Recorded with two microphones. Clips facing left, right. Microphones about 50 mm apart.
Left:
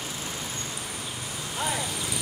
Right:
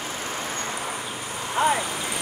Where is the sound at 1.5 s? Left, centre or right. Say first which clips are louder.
Right 8 dB; right.